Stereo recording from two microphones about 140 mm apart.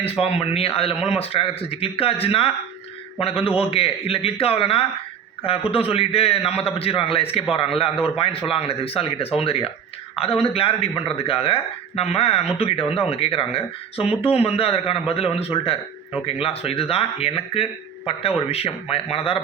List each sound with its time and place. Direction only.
0.0 s a man's voice: 45° left (ahead or behind)